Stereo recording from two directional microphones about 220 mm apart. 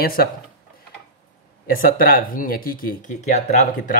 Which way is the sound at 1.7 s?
40° left (ahead or behind).